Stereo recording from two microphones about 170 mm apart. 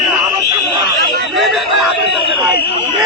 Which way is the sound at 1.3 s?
Centre (ahead or behind).